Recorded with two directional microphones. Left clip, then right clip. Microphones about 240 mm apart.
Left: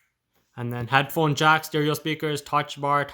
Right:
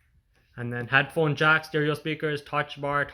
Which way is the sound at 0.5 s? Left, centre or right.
Left.